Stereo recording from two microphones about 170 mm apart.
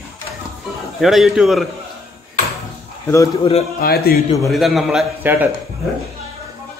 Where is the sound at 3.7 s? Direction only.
65° left (ahead or behind).